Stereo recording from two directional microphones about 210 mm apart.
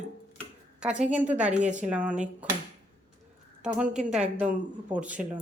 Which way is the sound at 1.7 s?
5° right (ahead or behind).